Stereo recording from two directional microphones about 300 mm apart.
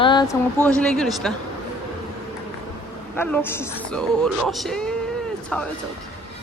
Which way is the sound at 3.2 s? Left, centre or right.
Centre.